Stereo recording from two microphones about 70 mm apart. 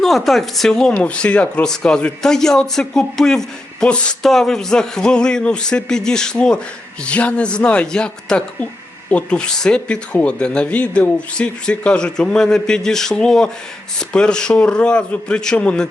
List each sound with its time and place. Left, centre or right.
0.0 s a woman's voice: centre
4.2 s speech: centre